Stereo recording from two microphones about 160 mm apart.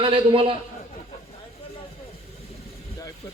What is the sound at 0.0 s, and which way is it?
Speech, 35° right (ahead or behind).